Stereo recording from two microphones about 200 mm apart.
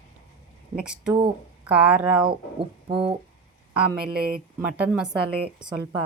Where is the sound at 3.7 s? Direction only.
5° right (ahead or behind).